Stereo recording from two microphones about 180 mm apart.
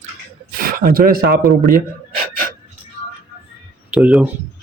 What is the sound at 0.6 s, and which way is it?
Speech, 55° right (ahead or behind).